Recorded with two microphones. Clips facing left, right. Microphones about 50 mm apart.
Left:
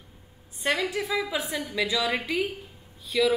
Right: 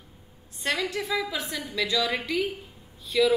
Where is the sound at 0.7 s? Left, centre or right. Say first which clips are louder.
Left 1 dB; centre.